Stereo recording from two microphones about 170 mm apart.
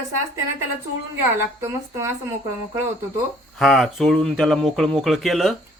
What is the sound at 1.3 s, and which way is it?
Speech, 15° right (ahead or behind).